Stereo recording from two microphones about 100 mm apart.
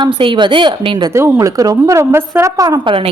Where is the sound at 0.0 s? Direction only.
55° right (ahead or behind).